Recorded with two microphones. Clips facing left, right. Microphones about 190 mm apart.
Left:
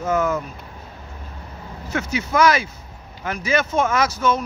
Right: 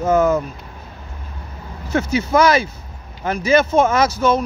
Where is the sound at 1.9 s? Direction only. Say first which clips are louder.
Right 6 dB; 30° right (ahead or behind).